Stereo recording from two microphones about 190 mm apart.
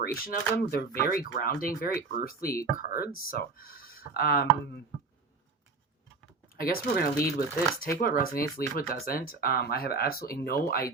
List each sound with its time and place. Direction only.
0.0 s speech: 50° left (ahead or behind)
6.6 s speech: 50° left (ahead or behind)